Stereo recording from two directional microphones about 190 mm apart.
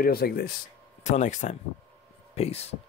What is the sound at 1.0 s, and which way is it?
Speech, 40° left (ahead or behind).